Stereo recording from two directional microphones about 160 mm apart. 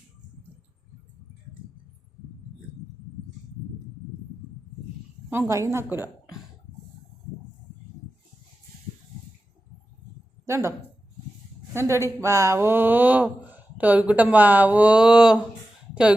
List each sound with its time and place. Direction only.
5.3 s speech: 15° right (ahead or behind)
10.4 s speech: 20° right (ahead or behind)